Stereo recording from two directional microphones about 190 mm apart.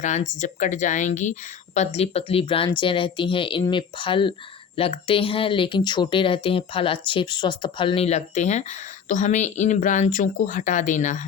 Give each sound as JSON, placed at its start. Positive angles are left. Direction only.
{"t": 0.0, "sound": "speech", "side_deg": 40}